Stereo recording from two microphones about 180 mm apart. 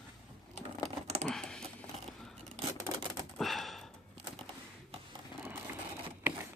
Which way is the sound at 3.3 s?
Centre (ahead or behind).